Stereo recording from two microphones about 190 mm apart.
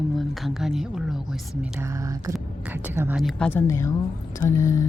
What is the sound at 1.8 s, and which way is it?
Speech, 15° right (ahead or behind).